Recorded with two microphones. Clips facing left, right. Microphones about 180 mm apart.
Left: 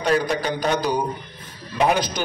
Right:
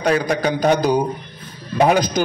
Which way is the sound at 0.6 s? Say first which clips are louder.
Right 7 dB; 45° right (ahead or behind).